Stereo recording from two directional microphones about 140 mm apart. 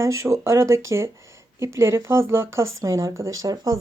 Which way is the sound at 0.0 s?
20° right (ahead or behind).